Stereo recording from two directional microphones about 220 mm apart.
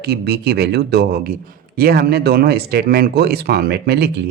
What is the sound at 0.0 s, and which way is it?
Speech, 45° right (ahead or behind).